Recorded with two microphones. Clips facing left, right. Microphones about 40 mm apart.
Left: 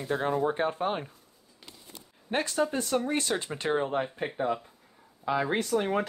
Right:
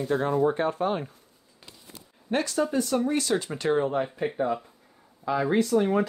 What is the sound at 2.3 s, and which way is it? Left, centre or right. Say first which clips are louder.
Speech: right 3 dB; left.